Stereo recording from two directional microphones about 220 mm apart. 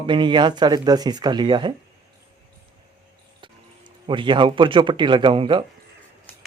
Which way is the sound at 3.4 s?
20° right (ahead or behind).